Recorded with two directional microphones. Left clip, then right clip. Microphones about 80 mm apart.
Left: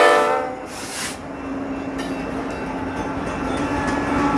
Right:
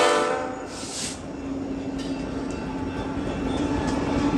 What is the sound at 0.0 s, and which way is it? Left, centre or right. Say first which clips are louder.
Train: left 6 dB; left.